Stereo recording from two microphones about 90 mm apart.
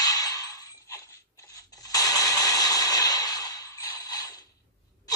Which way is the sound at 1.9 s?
40° left (ahead or behind).